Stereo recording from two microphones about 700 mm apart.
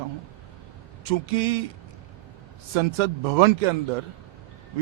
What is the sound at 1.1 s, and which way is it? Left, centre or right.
Speech, right.